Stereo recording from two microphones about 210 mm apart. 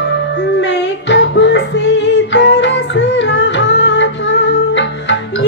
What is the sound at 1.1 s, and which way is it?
Music, 55° left (ahead or behind).